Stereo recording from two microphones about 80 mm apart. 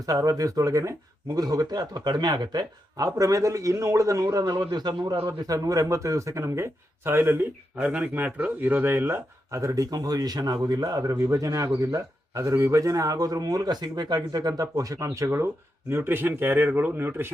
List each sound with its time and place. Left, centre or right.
0.0 s speech: right
3.1 s speech: right
4.5 s a man's voice: right
5.4 s speech: right
7.8 s speech: centre; by 15.3 s right
15.9 s speech: right